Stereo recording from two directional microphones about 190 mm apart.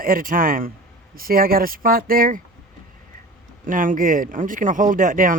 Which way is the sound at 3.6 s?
45° right (ahead or behind).